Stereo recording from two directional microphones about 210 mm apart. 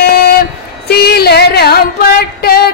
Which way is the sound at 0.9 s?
50° left (ahead or behind).